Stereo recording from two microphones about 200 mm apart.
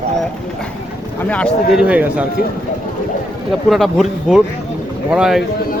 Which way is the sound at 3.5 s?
Centre (ahead or behind).